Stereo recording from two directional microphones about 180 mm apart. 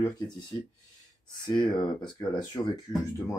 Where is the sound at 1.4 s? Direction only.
25° left (ahead or behind).